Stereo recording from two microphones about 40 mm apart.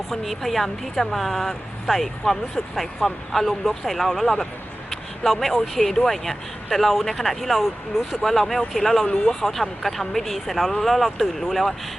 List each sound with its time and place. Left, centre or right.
0.1 s speech: centre
8.2 s speech: centre
9.0 s speech: left
9.3 s speech: centre